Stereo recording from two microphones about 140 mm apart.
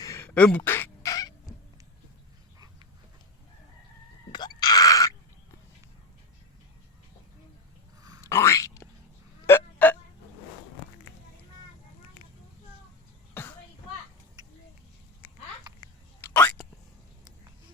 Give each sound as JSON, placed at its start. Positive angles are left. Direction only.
{"t": 0.0, "sound": "a sound", "side_deg": 20}
{"t": 4.3, "sound": "groan", "side_deg": 30}
{"t": 8.2, "sound": "boing", "side_deg": 20}
{"t": 9.5, "sound": "hiccup", "side_deg": 15}
{"t": 13.3, "sound": "a sound", "side_deg": 15}
{"t": 16.2, "sound": "whispering", "side_deg": 10}